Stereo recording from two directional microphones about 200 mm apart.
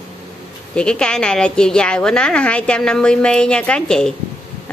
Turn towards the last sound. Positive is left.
turn(degrees=5)  # may be behind; listen again after turning